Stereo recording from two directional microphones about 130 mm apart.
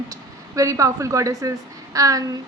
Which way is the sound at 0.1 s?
25° right (ahead or behind).